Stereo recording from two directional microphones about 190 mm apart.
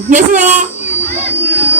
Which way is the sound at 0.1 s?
40° right (ahead or behind).